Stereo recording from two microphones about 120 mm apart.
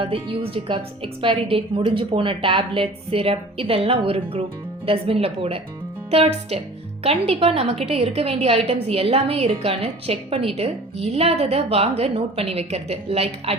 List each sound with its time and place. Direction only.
0.0 s a woman's voice: 50° right (ahead or behind)